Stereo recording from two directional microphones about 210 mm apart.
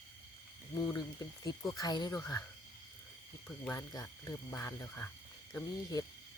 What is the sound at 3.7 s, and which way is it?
Speech, 15° left (ahead or behind).